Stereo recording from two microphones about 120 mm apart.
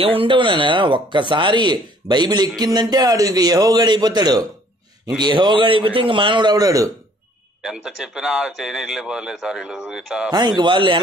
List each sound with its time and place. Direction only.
0.0 s speech: 50° right (ahead or behind); by 6.9 s 30° right (ahead or behind)
7.6 s a man's voice: 5° right (ahead or behind)
10.3 s speech: 35° right (ahead or behind)